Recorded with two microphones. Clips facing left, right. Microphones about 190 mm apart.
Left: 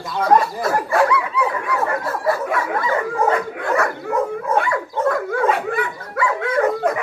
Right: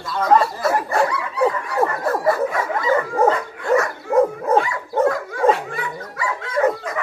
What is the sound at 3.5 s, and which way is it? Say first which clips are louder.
Dog: right 2 dB; 60° left (ahead or behind).